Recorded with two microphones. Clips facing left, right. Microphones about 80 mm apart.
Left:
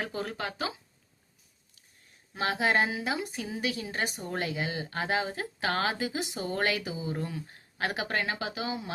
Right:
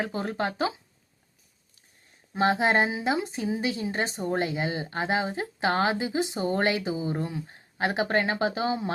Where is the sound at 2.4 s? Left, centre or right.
Right.